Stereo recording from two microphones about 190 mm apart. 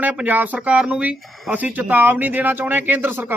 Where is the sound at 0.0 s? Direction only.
10° right (ahead or behind).